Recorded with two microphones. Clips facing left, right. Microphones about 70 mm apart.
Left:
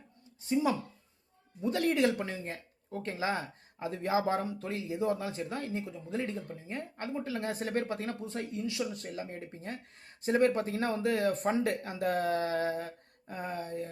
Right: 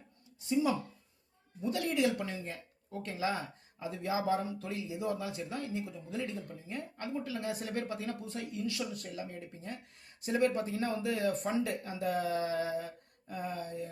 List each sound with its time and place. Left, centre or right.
0.4 s speech: left
4.4 s speech: left
9.3 s speech: left